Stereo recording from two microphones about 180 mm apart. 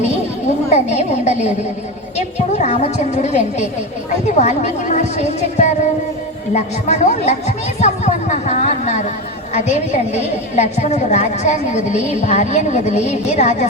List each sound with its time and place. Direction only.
0.7 s a woman's voice: 40° left (ahead or behind)